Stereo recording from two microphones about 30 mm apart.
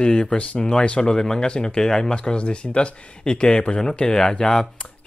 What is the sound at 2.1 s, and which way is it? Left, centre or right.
Speech, left.